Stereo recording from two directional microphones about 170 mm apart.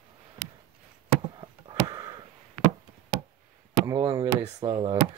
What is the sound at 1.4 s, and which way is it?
Sniff, 25° right (ahead or behind).